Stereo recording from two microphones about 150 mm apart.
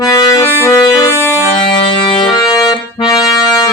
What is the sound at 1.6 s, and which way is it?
Accordion, 30° left (ahead or behind).